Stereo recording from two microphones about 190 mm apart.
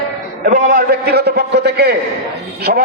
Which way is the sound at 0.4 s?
45° right (ahead or behind).